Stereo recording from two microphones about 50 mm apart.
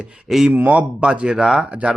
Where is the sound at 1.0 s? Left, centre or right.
Right.